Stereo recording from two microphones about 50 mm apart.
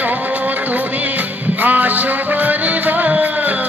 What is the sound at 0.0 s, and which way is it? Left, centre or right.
Music, right.